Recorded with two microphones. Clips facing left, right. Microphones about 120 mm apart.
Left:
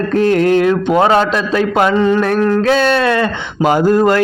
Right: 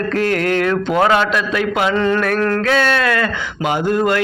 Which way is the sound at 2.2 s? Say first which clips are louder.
Left 4 dB; 25° left (ahead or behind).